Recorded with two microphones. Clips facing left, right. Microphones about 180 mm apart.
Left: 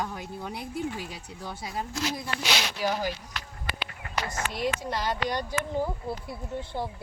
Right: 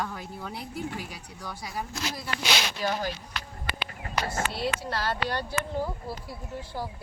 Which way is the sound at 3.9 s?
40° right (ahead or behind).